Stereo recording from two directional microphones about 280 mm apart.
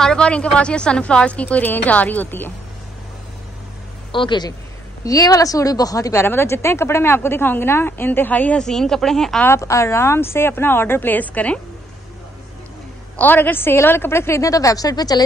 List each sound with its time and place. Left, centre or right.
0.0 s a woman's voice: centre
4.1 s a woman's voice: centre
13.1 s a woman's voice: centre